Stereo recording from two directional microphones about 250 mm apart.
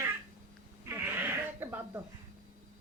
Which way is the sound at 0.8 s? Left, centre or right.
Centre.